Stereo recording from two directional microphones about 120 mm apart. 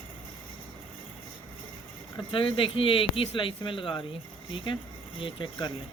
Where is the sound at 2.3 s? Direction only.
45° left (ahead or behind).